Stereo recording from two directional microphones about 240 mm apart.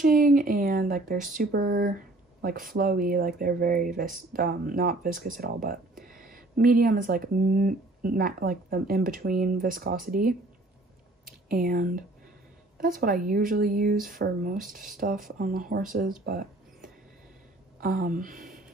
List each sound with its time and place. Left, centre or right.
0.0 s speech: right
13.0 s speech: right